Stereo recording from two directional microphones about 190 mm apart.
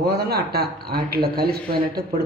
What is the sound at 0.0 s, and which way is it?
Speech, 55° right (ahead or behind).